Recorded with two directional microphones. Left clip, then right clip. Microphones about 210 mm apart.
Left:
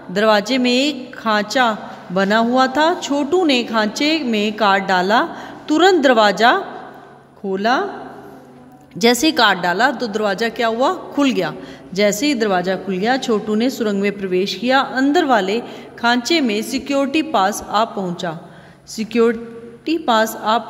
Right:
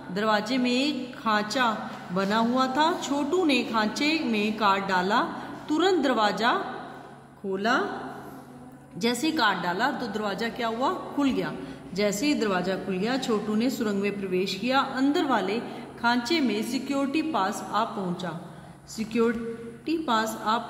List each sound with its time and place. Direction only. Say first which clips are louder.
0.1 s a woman's voice: left 11 dB; 40° left (ahead or behind)
8.9 s a woman's voice: left 12 dB; 40° left (ahead or behind)